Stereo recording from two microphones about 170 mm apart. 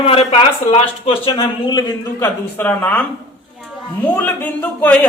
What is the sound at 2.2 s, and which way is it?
Speech, 10° left (ahead or behind).